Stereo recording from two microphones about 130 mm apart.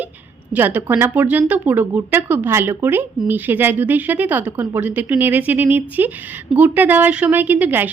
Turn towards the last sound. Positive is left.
turn(degrees=-15)  # may be behind; listen again after turning